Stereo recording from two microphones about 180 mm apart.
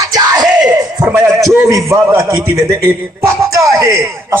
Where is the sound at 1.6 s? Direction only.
20° right (ahead or behind).